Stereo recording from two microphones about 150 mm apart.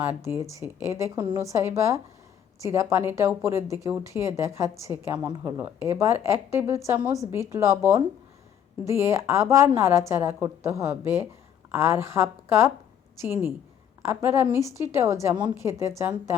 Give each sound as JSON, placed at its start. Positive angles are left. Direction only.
{"t": 0.0, "sound": "a woman's voice", "side_deg": -15}